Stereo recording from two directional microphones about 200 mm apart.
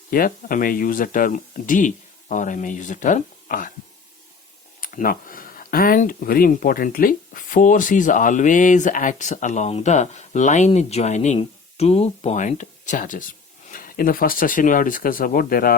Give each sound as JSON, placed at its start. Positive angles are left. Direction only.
{"t": 0.1, "sound": "speech", "side_deg": 45}
{"t": 4.8, "sound": "speech", "side_deg": 45}